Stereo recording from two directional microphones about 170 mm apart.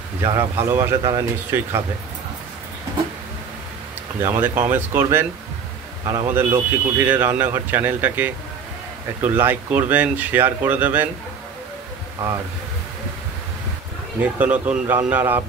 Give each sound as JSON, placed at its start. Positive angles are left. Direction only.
{"t": 0.2, "sound": "speech", "side_deg": -15}
{"t": 4.2, "sound": "speech", "side_deg": -15}
{"t": 14.2, "sound": "speech", "side_deg": -10}